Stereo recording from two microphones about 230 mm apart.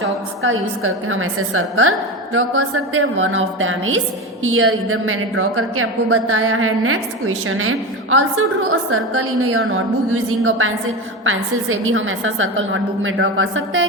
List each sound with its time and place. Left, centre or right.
0.4 s a woman's voice: right